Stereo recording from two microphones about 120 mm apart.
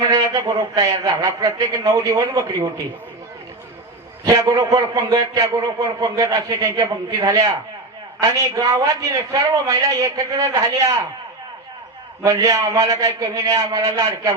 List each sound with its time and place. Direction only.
0.0 s a man's voice: 30° right (ahead or behind)
4.3 s a man's voice: 25° right (ahead or behind)
12.2 s a man's voice: 30° right (ahead or behind)